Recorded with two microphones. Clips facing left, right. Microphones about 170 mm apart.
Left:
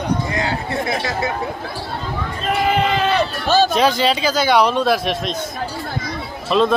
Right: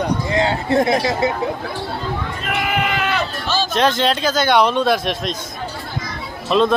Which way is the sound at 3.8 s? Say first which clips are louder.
Left 1 dB; 5° left (ahead or behind).